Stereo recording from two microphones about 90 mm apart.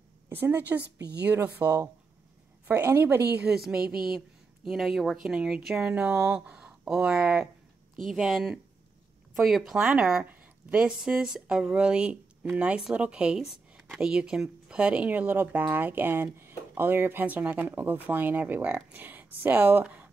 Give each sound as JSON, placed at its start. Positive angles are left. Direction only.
{"t": 0.3, "sound": "speech", "side_deg": -25}
{"t": 3.4, "sound": "a woman's voice", "side_deg": -5}